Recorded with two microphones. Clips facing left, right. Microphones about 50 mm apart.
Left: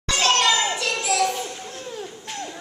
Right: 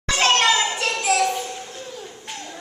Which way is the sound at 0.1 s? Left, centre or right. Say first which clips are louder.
Right 2 dB; right.